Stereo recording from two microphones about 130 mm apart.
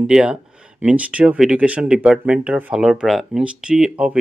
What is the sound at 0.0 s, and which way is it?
Speech, 5° right (ahead or behind).